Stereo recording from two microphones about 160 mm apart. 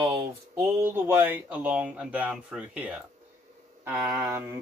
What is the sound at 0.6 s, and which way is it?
Speech, 15° right (ahead or behind).